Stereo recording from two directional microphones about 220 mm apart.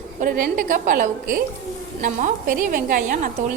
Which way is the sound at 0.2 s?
40° right (ahead or behind).